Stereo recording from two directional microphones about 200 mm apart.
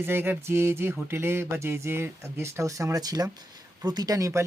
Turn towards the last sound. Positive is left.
turn(degrees=-15)  # may be behind; listen again after turning